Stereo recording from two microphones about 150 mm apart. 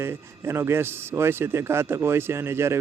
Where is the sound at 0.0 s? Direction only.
15° right (ahead or behind).